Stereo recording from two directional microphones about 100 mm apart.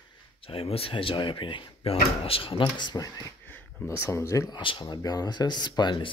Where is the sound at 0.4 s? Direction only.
70° left (ahead or behind); by 3.3 s 40° left (ahead or behind).